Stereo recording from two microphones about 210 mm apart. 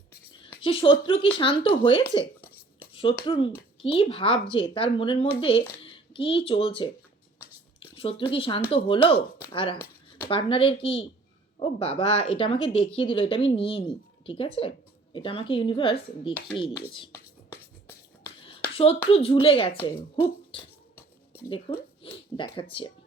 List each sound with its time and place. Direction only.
0.3 s speech: 25° left (ahead or behind)
2.9 s a sound: 25° left (ahead or behind)
3.2 s a child's voice: 25° left (ahead or behind)
17.1 s beatboxing: 15° left (ahead or behind)
18.7 s speech: 25° left (ahead or behind)